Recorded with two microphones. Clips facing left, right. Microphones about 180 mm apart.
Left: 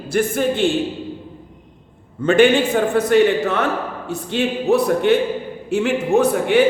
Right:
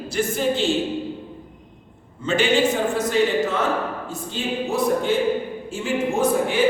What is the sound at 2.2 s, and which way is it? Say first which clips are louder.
A man's voice: left 6 dB; 55° left (ahead or behind).